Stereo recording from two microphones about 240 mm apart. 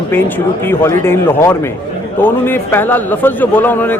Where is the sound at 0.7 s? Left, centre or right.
Centre.